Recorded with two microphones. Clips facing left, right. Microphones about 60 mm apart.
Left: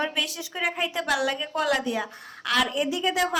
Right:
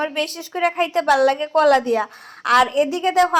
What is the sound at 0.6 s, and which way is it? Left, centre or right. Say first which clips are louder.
A woman's voice: right 9 dB; right.